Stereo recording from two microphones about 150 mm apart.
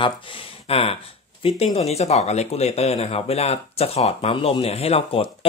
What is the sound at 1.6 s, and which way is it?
Speech, 45° left (ahead or behind).